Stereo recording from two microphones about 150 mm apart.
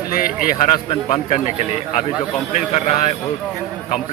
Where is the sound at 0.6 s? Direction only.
45° left (ahead or behind).